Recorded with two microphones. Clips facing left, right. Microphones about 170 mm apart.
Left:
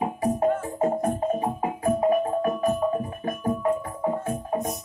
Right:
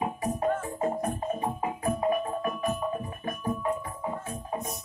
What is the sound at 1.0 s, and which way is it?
Music, 30° left (ahead or behind).